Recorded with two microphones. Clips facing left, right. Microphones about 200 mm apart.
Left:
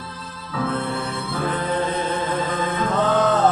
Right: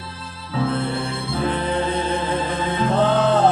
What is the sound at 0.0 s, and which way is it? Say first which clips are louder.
Music: even; 30° right (ahead or behind).